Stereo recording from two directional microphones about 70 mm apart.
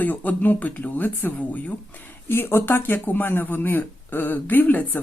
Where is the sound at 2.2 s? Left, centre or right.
Left.